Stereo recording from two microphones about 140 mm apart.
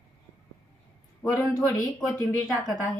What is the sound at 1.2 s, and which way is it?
Speech, centre (ahead or behind).